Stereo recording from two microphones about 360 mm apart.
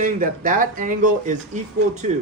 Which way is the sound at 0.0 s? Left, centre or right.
Right.